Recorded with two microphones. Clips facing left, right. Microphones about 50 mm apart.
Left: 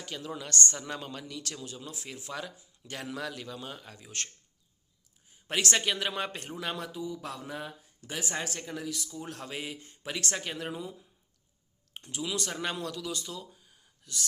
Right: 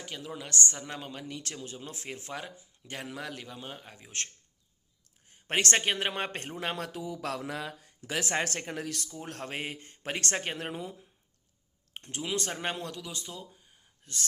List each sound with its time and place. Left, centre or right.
0.0 s a man's voice: centre
1.3 s speech: right
2.3 s a man's voice: right
5.5 s speech: right
6.9 s speech: right
9.1 s speech: right
11.9 s speech: right
14.0 s speech: right